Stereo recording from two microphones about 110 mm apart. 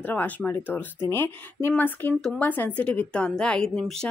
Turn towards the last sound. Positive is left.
turn(degrees=5)  # may be behind; listen again after turning